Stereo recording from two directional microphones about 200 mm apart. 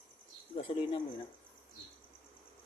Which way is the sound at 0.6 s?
25° left (ahead or behind).